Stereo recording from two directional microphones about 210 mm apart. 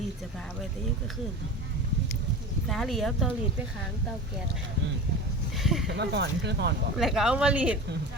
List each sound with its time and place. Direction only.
2.6 s speech: centre (ahead or behind)
5.5 s speech: centre (ahead or behind)
5.9 s speech: 55° right (ahead or behind)
7.0 s speech: centre (ahead or behind)